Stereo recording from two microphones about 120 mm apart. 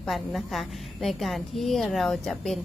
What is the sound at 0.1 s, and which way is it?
Speech, centre (ahead or behind).